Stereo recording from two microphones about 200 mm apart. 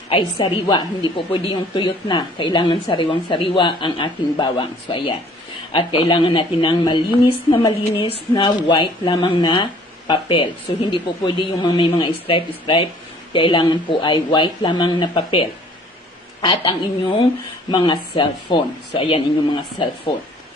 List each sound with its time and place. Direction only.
0.1 s a woman's voice: 25° left (ahead or behind)